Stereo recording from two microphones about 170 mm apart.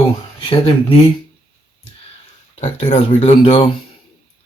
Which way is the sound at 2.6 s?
35° left (ahead or behind).